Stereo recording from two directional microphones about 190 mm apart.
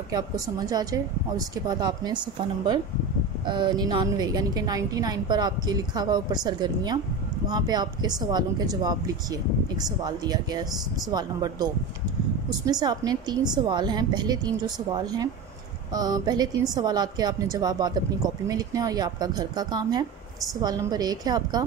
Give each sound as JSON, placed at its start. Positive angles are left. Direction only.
{"t": 0.1, "sound": "a woman's voice", "side_deg": -20}
{"t": 3.4, "sound": "a woman's voice", "side_deg": -25}
{"t": 15.9, "sound": "a woman's voice", "side_deg": -20}